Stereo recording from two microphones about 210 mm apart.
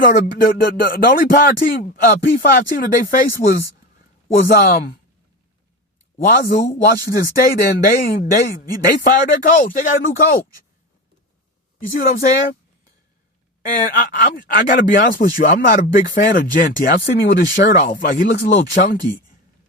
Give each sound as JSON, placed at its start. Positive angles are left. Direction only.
{"t": 0.8, "sound": "speech", "side_deg": 45}
{"t": 6.2, "sound": "speech", "side_deg": 45}
{"t": 11.9, "sound": "speech", "side_deg": 45}
{"t": 13.6, "sound": "speech", "side_deg": 40}